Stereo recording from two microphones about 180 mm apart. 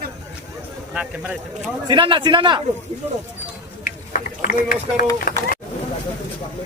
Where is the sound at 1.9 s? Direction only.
25° right (ahead or behind).